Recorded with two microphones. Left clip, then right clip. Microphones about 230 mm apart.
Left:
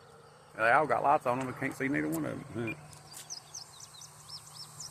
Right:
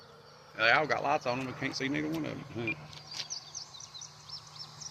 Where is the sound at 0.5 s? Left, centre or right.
Centre; by 2.6 s left.